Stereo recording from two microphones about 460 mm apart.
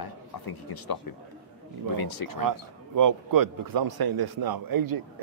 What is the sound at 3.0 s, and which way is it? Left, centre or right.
A man's voice, right.